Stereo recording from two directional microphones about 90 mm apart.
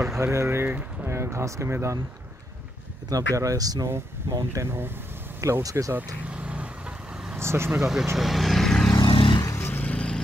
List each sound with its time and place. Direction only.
0.2 s speech: 30° right (ahead or behind)
3.1 s speech: 40° right (ahead or behind)
4.6 s speech: 25° right (ahead or behind)
5.4 s speech: 40° right (ahead or behind)
5.9 s vehicle: 15° right (ahead or behind)
7.3 s speech: 30° right (ahead or behind)
7.8 s speech: 5° right (ahead or behind)
8.2 s vehicle: centre (ahead or behind)
8.9 s vehicle: 65° left (ahead or behind)
9.6 s vehicle: 20° left (ahead or behind)